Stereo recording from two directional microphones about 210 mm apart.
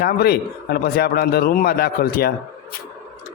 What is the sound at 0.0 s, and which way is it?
A man's voice, 50° left (ahead or behind).